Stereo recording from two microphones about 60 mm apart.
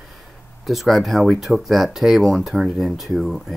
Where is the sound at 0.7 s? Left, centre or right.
Centre.